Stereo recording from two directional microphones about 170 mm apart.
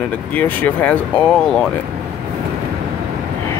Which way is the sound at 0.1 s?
10° left (ahead or behind).